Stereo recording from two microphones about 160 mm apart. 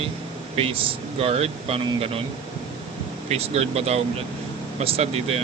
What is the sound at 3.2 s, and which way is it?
Speech, 40° right (ahead or behind).